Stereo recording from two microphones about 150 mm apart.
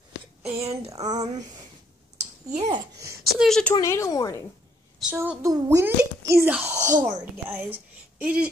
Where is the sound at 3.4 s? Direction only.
5° left (ahead or behind).